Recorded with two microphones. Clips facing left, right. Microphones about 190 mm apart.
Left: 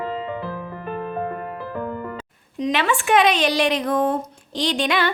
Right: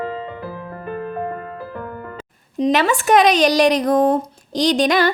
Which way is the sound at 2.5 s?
35° right (ahead or behind).